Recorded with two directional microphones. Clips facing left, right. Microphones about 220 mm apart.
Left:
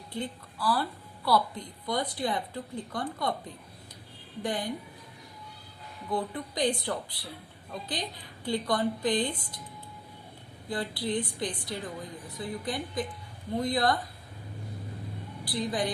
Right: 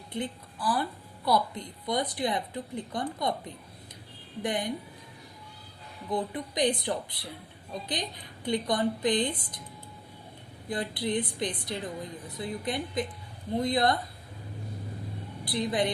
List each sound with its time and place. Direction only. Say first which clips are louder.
0.1 s a woman's voice: right 2 dB; 20° right (ahead or behind)
6.1 s a woman's voice: right 1 dB; 20° right (ahead or behind)
10.7 s a woman's voice: right 1 dB; 20° right (ahead or behind)
15.4 s a woman's voice: right 2 dB; 20° right (ahead or behind)